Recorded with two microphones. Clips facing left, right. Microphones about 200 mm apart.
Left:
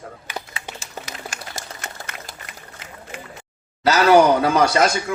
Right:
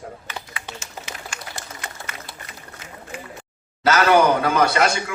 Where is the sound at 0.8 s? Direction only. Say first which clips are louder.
Left 2 dB; 40° left (ahead or behind).